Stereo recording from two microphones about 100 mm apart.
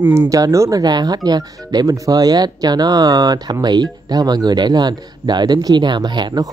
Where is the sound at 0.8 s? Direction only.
45° right (ahead or behind).